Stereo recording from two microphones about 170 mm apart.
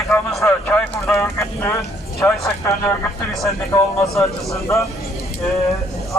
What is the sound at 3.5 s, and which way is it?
Speech, 15° left (ahead or behind).